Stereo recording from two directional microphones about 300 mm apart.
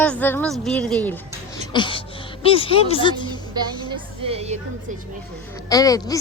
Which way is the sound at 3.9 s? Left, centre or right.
Centre.